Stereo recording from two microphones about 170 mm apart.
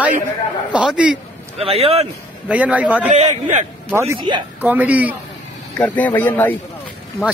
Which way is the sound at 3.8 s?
15° right (ahead or behind).